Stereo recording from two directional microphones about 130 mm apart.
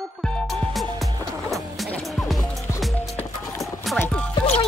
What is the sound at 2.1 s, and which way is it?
Music, centre (ahead or behind).